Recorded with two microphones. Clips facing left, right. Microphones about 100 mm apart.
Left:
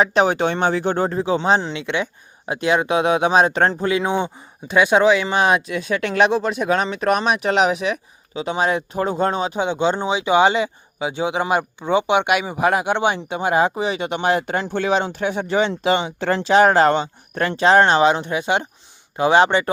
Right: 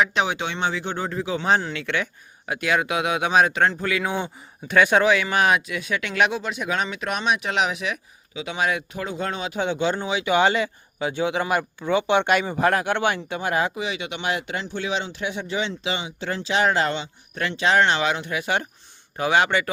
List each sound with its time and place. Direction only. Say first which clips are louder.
0.0 s speech: left 6 dB; 40° left (ahead or behind)
9.6 s speech: even; 20° left (ahead or behind)